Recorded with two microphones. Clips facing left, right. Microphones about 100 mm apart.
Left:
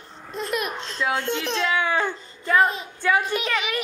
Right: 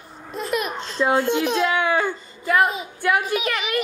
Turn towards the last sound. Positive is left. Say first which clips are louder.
# right 2 dB
turn(degrees=0)  # may be behind; listen again after turning